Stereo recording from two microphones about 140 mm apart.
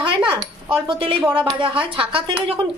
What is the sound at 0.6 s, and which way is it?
Speech, 40° right (ahead or behind).